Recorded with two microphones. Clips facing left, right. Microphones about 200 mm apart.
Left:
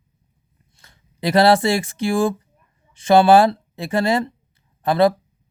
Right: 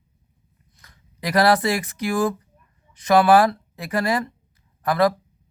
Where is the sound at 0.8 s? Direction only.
25° left (ahead or behind).